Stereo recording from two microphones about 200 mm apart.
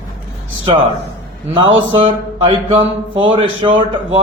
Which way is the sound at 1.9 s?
25° right (ahead or behind).